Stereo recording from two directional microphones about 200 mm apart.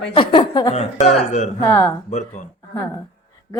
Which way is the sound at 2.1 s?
35° left (ahead or behind).